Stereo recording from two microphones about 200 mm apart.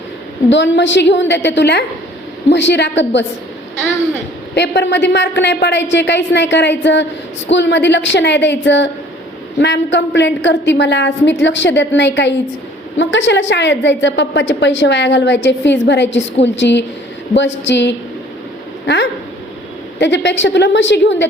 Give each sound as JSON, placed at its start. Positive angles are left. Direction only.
{"t": 0.5, "sound": "a woman's voice", "side_deg": 65}
{"t": 4.5, "sound": "a woman's voice", "side_deg": 60}
{"t": 20.0, "sound": "a woman's voice", "side_deg": 60}